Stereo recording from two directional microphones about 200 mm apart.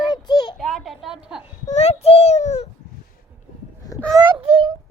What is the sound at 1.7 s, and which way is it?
A child's voice, 30° left (ahead or behind).